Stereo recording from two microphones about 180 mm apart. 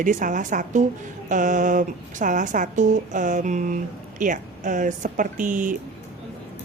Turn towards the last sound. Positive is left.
turn(degrees=-45)  # may be behind; listen again after turning